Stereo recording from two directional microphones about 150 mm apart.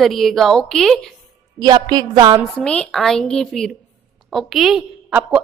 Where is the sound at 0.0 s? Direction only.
Centre (ahead or behind).